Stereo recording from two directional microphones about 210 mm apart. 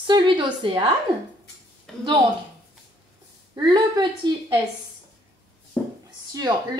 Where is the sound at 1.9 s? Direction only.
5° left (ahead or behind).